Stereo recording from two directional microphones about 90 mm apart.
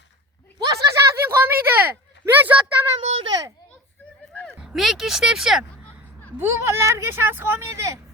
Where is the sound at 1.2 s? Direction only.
25° right (ahead or behind).